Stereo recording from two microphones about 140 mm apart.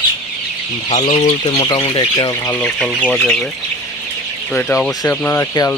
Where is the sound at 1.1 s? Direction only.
50° left (ahead or behind).